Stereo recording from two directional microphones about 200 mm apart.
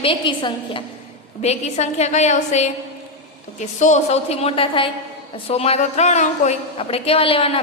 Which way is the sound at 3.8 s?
35° left (ahead or behind).